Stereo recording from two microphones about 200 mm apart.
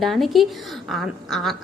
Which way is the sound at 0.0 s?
Centre (ahead or behind).